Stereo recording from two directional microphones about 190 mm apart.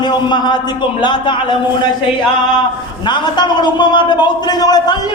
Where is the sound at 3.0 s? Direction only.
25° left (ahead or behind).